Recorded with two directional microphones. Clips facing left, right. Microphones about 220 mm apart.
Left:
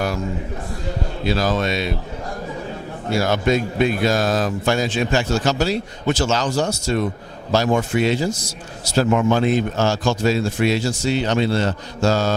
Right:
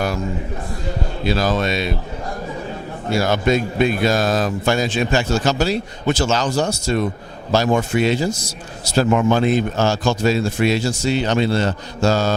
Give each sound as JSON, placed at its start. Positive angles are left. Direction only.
{"t": 1.3, "sound": "speech", "side_deg": -15}
{"t": 3.1, "sound": "speech", "side_deg": -10}
{"t": 7.7, "sound": "speech", "side_deg": -20}
{"t": 9.0, "sound": "speech", "side_deg": -15}